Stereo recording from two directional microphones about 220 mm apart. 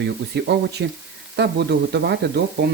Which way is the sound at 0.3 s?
50° right (ahead or behind).